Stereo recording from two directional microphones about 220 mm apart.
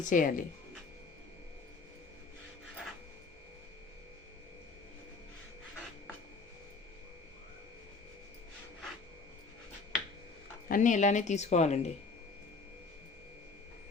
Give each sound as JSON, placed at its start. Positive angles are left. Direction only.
{"t": 0.0, "sound": "speech", "side_deg": 35}
{"t": 10.7, "sound": "speech", "side_deg": 35}